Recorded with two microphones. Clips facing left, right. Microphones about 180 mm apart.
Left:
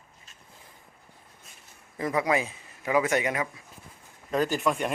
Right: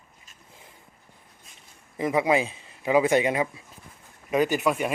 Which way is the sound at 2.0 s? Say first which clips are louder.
Right 3 dB; 20° right (ahead or behind).